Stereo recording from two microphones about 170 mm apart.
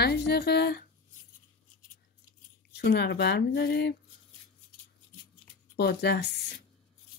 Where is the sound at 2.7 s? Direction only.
80° left.